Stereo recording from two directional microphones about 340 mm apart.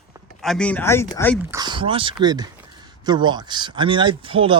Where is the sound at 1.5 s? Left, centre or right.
Centre.